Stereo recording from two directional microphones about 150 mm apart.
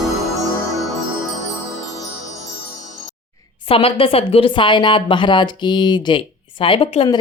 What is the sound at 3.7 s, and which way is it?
A woman's voice, 40° left (ahead or behind).